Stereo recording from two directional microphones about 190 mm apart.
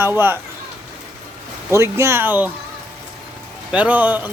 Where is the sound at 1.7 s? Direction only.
15° right (ahead or behind).